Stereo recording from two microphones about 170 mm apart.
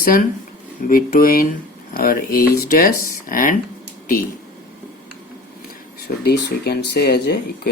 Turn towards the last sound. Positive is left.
turn(degrees=70)  # may be behind; listen again after turning